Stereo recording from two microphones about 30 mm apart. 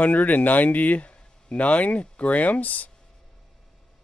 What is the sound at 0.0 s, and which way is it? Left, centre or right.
Speech, left.